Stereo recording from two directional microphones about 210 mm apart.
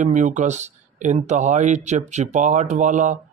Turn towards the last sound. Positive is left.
turn(degrees=-35)  # may be behind; listen again after turning